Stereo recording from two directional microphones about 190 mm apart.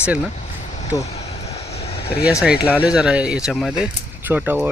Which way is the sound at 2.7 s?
5° right (ahead or behind).